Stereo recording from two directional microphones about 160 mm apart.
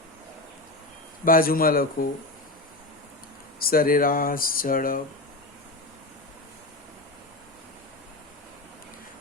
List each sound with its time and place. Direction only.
1.2 s speech: 65° left (ahead or behind)
3.6 s speech: 65° left (ahead or behind)